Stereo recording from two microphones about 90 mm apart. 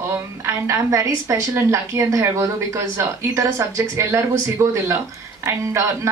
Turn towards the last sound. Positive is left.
turn(degrees=-35)  # may be behind; listen again after turning